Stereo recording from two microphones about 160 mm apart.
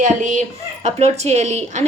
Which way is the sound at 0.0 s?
50° right (ahead or behind).